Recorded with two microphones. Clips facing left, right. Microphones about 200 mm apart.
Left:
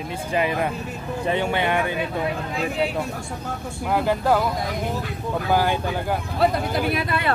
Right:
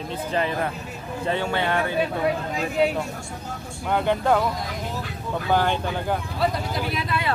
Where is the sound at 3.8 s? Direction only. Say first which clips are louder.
Left 1 dB; 5° left (ahead or behind).